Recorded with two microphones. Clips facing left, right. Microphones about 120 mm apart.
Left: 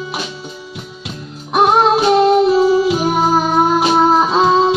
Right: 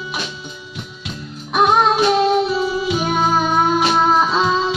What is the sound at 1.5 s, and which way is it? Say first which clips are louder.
Music: left 3 dB; 25° left (ahead or behind).